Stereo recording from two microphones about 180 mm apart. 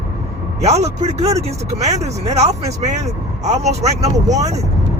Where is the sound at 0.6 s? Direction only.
35° right (ahead or behind).